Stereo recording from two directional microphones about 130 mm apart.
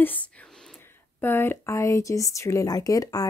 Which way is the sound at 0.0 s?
15° left (ahead or behind).